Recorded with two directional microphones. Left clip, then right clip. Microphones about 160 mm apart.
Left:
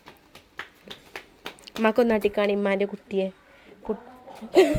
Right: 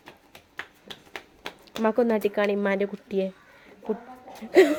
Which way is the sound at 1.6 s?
5° left (ahead or behind).